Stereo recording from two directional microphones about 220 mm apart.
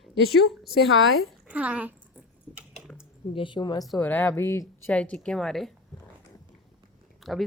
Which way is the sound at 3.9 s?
10° left (ahead or behind).